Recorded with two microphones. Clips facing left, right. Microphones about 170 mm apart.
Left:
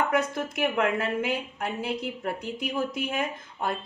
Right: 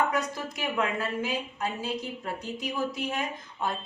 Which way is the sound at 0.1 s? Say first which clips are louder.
Left 4 dB; 60° left (ahead or behind).